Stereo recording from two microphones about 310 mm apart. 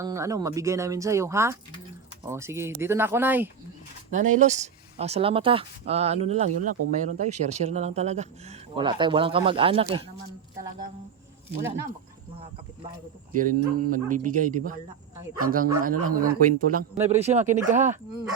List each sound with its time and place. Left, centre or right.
0.0 s speech: centre
4.1 s speech: right
13.3 s speech: right
15.9 s speech: right
16.1 s speech: right